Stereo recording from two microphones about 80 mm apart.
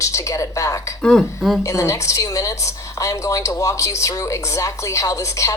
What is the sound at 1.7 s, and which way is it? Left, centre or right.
A woman's voice, left.